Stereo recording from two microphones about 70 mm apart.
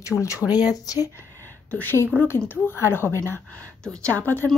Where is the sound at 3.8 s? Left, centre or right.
Centre.